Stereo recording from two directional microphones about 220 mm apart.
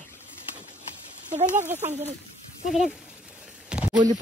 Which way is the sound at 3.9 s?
35° right (ahead or behind).